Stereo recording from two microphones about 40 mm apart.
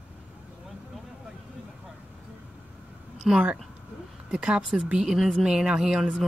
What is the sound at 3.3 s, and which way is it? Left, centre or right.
Speech, centre.